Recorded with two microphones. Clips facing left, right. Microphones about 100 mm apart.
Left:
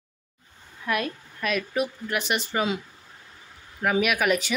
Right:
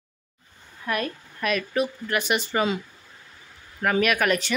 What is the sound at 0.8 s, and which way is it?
A woman's voice, 5° left (ahead or behind).